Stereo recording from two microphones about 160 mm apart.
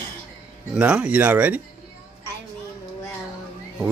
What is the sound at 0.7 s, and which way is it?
Speech, 5° right (ahead or behind).